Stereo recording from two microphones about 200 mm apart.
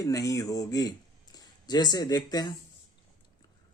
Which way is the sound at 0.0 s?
15° left (ahead or behind).